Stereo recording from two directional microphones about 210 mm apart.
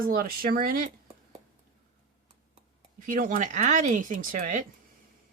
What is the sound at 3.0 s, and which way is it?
Speech, 40° right (ahead or behind).